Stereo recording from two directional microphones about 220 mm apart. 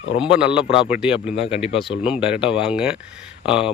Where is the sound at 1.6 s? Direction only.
25° left (ahead or behind).